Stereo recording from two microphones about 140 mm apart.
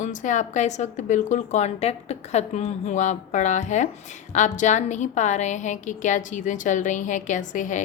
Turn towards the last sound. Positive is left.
turn(degrees=65)  # may be behind; listen again after turning